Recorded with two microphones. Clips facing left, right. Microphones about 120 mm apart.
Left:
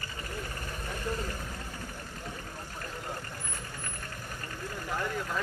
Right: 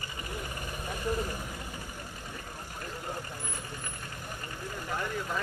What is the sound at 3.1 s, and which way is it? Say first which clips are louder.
Vehicle: right 1 dB; 15° right (ahead or behind).